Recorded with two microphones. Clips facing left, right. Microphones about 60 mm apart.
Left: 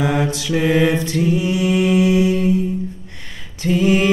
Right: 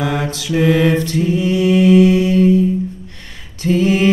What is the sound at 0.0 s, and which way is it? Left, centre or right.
Mantra, centre.